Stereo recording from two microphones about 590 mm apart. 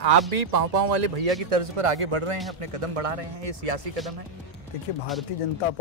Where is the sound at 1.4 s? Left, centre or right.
Right.